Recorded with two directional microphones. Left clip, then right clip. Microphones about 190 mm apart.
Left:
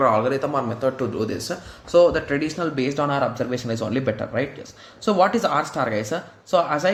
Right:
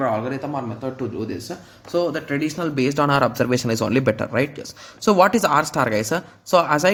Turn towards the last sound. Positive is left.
turn(degrees=-40)  # may be behind; listen again after turning